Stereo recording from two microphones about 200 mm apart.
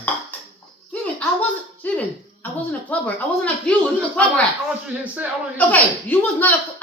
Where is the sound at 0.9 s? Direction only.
5° left (ahead or behind).